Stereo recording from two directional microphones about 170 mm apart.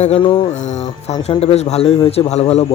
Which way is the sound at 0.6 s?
45° left (ahead or behind).